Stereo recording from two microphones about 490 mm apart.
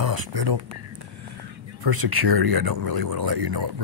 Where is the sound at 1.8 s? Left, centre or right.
Right.